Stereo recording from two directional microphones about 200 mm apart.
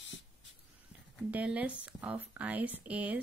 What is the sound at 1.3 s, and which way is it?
Speech, 5° right (ahead or behind).